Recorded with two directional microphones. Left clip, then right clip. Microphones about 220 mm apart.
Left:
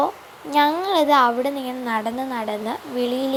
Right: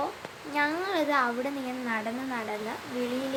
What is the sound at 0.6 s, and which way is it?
A woman's voice, 30° left (ahead or behind).